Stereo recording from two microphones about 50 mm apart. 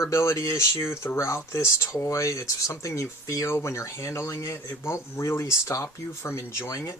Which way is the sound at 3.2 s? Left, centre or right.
Left.